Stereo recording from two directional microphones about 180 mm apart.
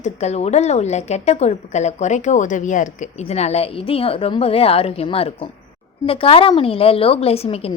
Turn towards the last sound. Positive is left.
turn(degrees=35)  # may be behind; listen again after turning